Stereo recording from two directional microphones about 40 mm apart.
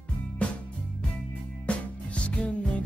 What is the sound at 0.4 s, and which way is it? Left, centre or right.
Music, left.